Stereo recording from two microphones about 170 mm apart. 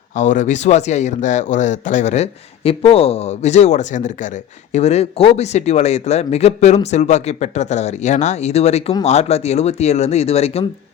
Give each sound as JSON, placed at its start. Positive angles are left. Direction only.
{"t": 0.2, "sound": "speech", "side_deg": 45}